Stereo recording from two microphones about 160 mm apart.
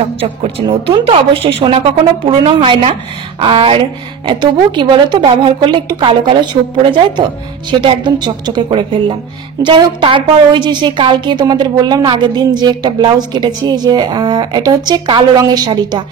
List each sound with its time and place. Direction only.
0.0 s a woman's voice: 35° right (ahead or behind)